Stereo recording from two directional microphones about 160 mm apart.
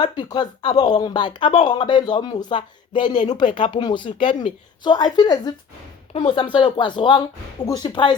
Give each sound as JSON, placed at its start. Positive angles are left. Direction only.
{"t": 0.0, "sound": "speech", "side_deg": 30}